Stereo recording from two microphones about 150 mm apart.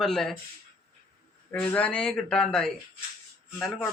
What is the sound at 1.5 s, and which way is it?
Speech, 10° left (ahead or behind).